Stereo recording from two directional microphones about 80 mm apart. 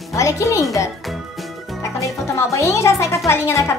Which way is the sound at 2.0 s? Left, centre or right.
Left.